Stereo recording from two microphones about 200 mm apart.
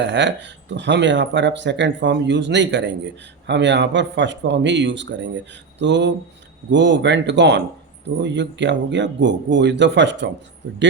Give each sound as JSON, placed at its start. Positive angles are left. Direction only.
{"t": 0.0, "sound": "speech", "side_deg": -60}